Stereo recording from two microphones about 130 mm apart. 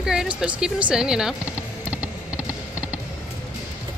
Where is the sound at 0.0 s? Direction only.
5° right (ahead or behind).